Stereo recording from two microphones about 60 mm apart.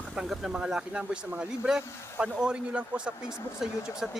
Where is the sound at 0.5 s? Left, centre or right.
Centre.